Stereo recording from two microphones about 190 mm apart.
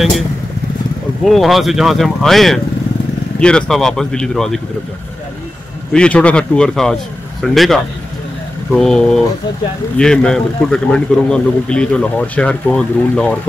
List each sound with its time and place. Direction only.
1.2 s a man's voice: centre (ahead or behind)
5.9 s a man's voice: 5° left (ahead or behind)